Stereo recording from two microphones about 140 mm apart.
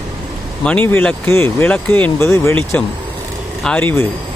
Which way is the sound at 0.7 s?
10° left (ahead or behind).